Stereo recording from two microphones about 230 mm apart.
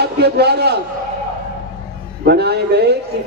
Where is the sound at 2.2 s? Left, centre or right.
Right.